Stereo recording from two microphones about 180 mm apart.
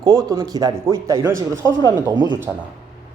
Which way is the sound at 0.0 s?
25° right (ahead or behind).